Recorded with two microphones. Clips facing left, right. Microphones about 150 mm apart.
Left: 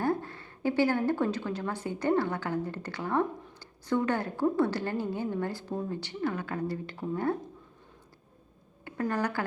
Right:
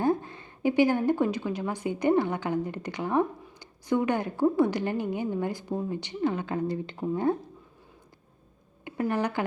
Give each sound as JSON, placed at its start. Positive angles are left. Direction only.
{"t": 0.0, "sound": "a woman's voice", "side_deg": -20}
{"t": 8.8, "sound": "a woman's voice", "side_deg": -15}